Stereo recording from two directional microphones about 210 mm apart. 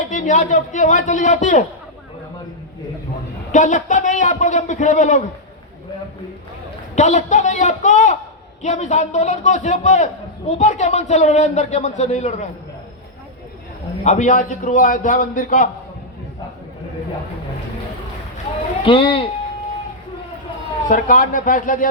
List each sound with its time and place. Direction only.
0.0 s speech: 35° left (ahead or behind)
3.5 s speech: 35° left (ahead or behind)
6.9 s speech: 35° left (ahead or behind)
14.0 s speech: 35° left (ahead or behind)
18.9 s speech: 25° left (ahead or behind)
20.8 s speech: 40° left (ahead or behind)